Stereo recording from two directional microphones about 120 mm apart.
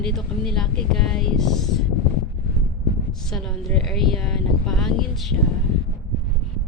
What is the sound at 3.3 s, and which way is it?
Speech, centre (ahead or behind).